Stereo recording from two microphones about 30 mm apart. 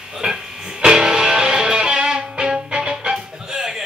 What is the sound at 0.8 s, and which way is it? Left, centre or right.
Music, right.